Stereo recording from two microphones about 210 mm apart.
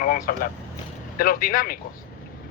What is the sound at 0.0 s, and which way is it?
Vehicle, 40° left (ahead or behind).